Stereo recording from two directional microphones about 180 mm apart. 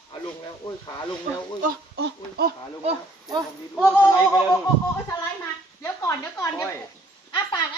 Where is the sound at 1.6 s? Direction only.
60° right (ahead or behind).